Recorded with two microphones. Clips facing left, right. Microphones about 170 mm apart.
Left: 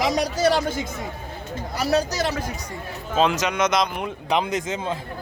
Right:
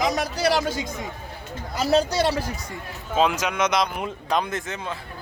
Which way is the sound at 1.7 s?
30° right (ahead or behind).